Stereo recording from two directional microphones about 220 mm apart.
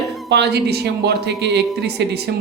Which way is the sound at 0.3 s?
50° right (ahead or behind).